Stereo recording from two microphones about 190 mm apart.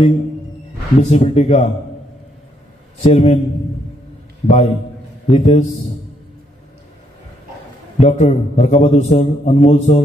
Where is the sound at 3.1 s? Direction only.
35° left (ahead or behind).